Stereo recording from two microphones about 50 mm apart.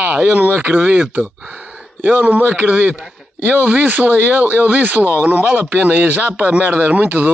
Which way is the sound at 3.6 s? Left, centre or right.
Right.